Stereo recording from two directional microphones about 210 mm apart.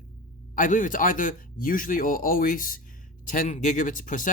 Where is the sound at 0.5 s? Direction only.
40° left (ahead or behind).